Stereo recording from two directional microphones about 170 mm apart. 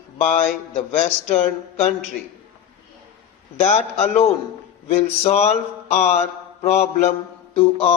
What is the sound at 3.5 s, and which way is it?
Mantra, 40° left (ahead or behind).